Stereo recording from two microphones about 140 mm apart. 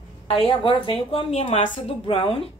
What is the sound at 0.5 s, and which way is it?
A woman's voice, 35° left (ahead or behind).